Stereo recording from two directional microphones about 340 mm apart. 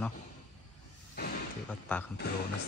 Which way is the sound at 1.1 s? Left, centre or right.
Left.